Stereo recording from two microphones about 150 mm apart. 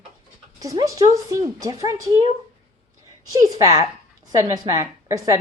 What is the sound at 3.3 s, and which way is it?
Speech, 25° right (ahead or behind).